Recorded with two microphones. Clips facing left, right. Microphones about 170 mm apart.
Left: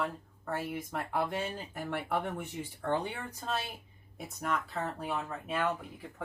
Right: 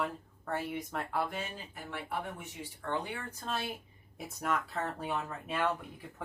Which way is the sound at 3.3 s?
Centre (ahead or behind).